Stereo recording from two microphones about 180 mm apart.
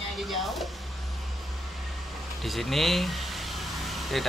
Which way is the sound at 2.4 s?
Centre (ahead or behind).